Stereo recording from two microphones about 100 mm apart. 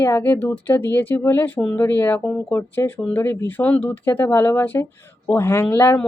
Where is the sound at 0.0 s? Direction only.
25° left (ahead or behind).